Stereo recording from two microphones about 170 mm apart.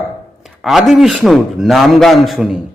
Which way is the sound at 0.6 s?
Centre (ahead or behind).